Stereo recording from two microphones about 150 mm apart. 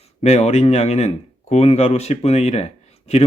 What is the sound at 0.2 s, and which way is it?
Speech, 45° left (ahead or behind).